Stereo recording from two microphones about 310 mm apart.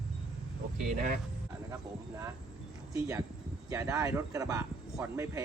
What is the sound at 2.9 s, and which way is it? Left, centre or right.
Speech, centre.